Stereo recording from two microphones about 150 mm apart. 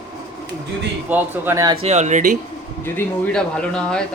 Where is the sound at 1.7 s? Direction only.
45° right (ahead or behind).